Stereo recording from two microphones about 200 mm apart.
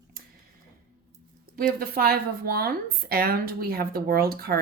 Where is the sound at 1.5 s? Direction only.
50° right (ahead or behind).